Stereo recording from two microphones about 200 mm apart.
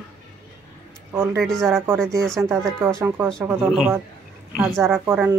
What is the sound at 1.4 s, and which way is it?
Speech, centre (ahead or behind).